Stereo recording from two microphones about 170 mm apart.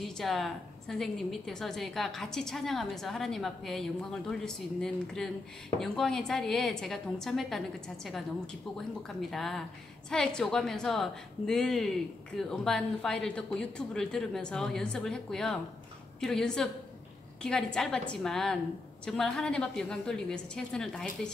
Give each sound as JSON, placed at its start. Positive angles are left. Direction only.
{"t": 0.0, "sound": "a woman's voice", "side_deg": 0}
{"t": 9.3, "sound": "a woman's voice", "side_deg": 0}